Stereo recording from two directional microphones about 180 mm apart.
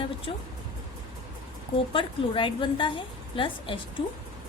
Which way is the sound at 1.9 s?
30° left (ahead or behind).